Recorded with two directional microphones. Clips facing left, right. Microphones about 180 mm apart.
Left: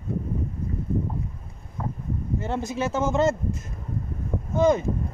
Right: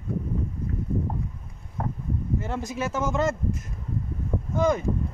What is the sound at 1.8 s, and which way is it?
Boat, 65° right (ahead or behind).